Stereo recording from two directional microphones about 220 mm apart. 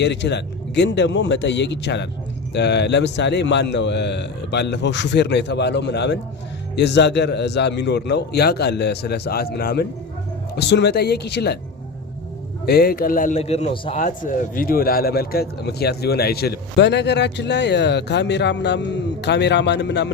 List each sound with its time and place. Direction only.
0.0 s a man's voice: 50° left (ahead or behind)
12.6 s a man's voice: 45° left (ahead or behind)